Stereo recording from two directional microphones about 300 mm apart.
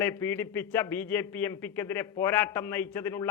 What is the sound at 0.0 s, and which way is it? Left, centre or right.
A man's voice, centre.